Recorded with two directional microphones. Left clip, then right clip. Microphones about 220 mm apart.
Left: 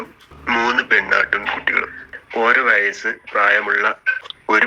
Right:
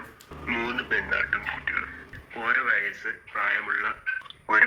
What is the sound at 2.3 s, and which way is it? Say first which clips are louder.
Speech: left 10 dB; 45° left (ahead or behind).